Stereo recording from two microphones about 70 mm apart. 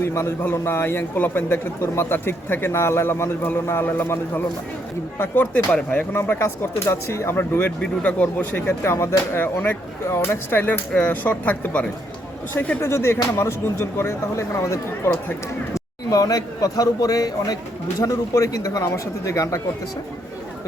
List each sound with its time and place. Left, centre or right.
0.0 s a man's voice: left
5.7 s speech: centre
6.1 s a man's voice: left
7.8 s a man's voice: centre; by 9.4 s left
9.4 s a man's voice: left
12.8 s a man's voice: left
15.7 s a man's voice: left
18.0 s speech: left
18.9 s speech: left